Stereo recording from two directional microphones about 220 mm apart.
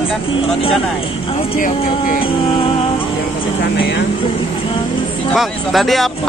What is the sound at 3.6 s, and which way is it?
Speech, 50° left (ahead or behind).